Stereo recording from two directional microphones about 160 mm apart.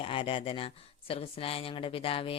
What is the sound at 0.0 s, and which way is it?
Speech, 35° left (ahead or behind).